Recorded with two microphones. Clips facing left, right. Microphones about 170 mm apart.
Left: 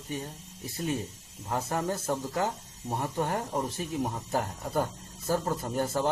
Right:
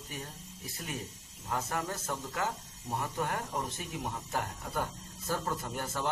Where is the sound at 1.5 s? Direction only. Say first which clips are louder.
Left 5 dB; 30° left (ahead or behind).